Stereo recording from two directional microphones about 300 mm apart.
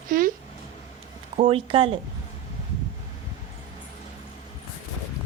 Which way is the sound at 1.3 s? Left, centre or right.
Centre.